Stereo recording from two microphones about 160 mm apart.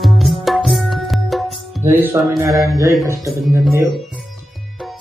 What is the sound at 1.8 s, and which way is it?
Speech, 15° right (ahead or behind).